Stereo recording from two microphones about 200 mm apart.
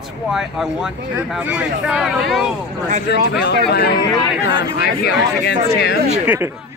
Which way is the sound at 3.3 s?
55° left (ahead or behind).